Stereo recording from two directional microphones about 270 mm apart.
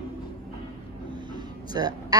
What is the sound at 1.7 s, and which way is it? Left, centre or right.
Speech, centre.